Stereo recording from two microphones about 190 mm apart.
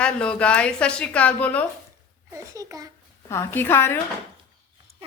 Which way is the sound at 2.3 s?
15° right (ahead or behind).